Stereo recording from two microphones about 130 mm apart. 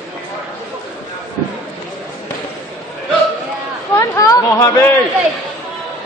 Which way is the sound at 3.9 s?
25° left (ahead or behind).